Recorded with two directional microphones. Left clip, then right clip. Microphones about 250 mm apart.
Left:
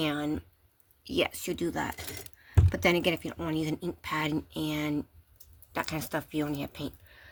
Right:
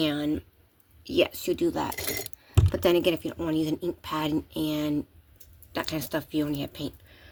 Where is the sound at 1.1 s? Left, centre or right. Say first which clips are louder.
Right 5 dB; left.